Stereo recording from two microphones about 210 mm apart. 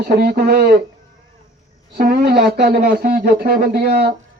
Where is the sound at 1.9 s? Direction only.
45° right (ahead or behind).